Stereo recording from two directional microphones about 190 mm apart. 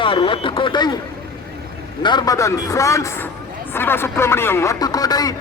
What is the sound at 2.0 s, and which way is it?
Speech, 20° left (ahead or behind).